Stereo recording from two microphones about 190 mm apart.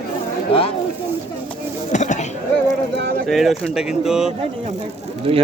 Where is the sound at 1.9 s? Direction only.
40° left (ahead or behind).